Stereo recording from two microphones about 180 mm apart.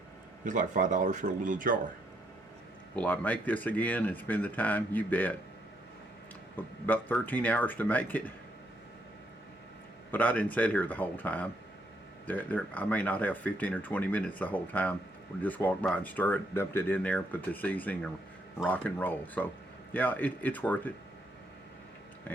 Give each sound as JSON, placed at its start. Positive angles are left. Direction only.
{"t": 0.4, "sound": "speech", "side_deg": -45}
{"t": 2.9, "sound": "speech", "side_deg": 10}
{"t": 6.8, "sound": "speech", "side_deg": 10}
{"t": 10.1, "sound": "speech", "side_deg": 10}